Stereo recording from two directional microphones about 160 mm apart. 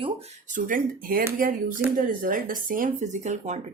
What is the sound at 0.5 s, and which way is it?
Speech, 60° right (ahead or behind).